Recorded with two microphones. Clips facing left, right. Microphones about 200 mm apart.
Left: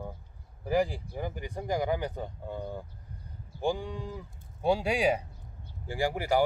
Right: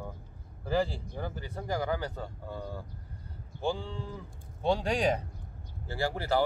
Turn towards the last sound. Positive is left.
turn(degrees=15)  # may be behind; listen again after turning